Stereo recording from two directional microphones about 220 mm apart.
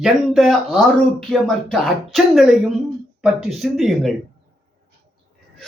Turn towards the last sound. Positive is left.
turn(degrees=0)  # may be behind; listen again after turning